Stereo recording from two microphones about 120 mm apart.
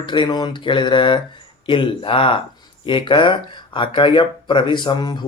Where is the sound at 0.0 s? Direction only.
40° left (ahead or behind).